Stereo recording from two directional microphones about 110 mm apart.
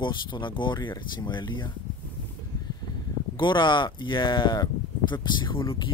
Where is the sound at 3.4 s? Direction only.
45° left (ahead or behind).